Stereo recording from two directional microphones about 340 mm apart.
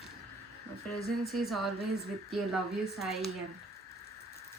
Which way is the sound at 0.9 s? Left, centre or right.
Centre.